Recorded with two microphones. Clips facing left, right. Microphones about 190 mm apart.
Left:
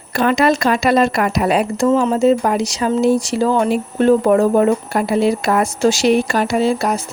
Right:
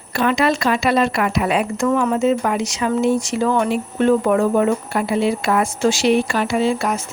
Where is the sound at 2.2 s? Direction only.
35° left (ahead or behind).